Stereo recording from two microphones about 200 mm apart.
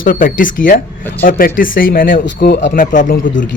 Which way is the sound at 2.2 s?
55° left (ahead or behind).